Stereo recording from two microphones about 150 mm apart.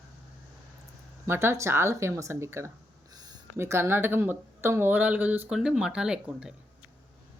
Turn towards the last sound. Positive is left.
turn(degrees=-5)  # may be behind; listen again after turning